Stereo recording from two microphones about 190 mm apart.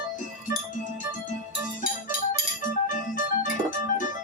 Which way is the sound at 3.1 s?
45° left (ahead or behind).